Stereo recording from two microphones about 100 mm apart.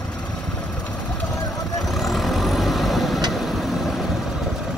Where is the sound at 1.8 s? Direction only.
Centre (ahead or behind).